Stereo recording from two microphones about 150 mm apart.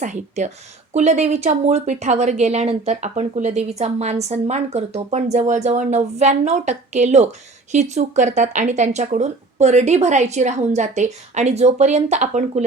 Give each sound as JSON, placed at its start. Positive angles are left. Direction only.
{"t": 0.0, "sound": "speech", "side_deg": -50}